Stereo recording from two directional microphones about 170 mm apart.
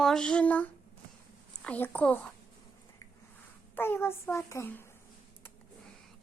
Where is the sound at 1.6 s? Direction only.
10° left (ahead or behind).